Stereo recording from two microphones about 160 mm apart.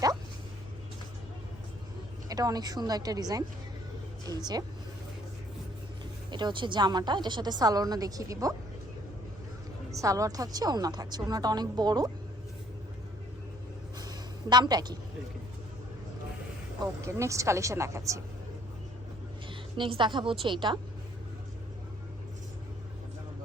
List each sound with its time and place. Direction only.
2.3 s a woman's voice: 25° right (ahead or behind)
6.3 s a woman's voice: 30° right (ahead or behind)
9.9 s a woman's voice: 20° right (ahead or behind)
14.0 s a sound: 25° right (ahead or behind)
16.8 s a woman's voice: 20° right (ahead or behind)
19.5 s a woman's voice: 30° right (ahead or behind)